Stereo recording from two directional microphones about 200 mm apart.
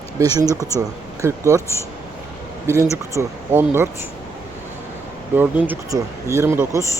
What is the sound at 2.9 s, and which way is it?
Speech, 15° right (ahead or behind).